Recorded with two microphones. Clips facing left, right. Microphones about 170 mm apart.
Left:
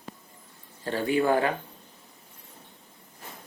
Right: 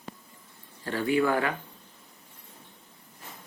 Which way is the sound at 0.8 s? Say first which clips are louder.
Left 1 dB; 30° left (ahead or behind).